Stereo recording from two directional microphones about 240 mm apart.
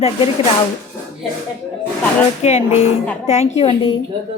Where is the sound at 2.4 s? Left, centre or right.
Left.